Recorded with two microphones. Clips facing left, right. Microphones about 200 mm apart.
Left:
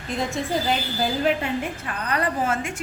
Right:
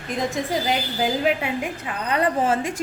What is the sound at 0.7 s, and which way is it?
A woman's voice, 15° right (ahead or behind).